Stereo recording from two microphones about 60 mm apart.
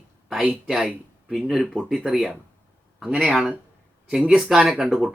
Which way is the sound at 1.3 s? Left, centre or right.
Centre.